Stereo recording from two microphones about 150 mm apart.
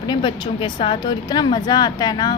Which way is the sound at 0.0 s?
30° left (ahead or behind).